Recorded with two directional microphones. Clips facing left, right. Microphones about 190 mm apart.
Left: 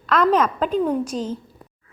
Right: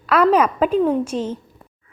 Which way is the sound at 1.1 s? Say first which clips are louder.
Right 2 dB; 35° left (ahead or behind).